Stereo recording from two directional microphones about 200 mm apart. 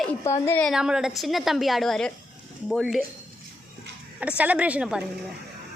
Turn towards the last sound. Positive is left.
turn(degrees=-5)  # may be behind; listen again after turning